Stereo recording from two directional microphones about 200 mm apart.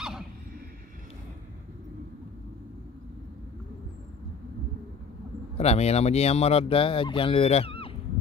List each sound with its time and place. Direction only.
5.6 s speech: 30° left (ahead or behind)